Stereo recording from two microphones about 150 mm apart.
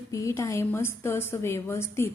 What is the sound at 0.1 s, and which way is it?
A woman's voice, 20° left (ahead or behind).